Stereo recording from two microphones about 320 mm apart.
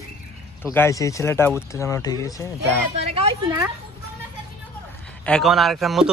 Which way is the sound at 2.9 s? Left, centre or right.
Centre.